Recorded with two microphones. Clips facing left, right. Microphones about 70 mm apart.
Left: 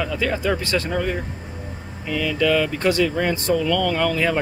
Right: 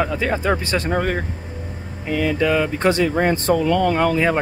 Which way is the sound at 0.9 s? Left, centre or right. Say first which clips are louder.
Right 3 dB; right.